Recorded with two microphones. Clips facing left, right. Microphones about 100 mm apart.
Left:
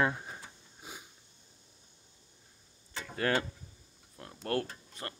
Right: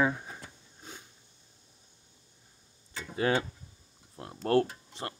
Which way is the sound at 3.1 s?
20° right (ahead or behind).